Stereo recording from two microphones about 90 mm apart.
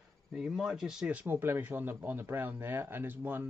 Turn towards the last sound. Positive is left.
turn(degrees=-25)  # may be behind; listen again after turning